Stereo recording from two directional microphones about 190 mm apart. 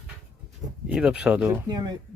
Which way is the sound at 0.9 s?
5° right (ahead or behind).